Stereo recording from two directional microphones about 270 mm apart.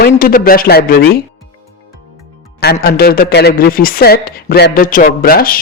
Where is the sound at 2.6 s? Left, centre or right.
Left.